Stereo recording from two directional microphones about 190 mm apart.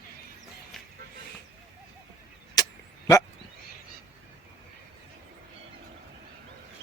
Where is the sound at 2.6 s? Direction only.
20° left (ahead or behind).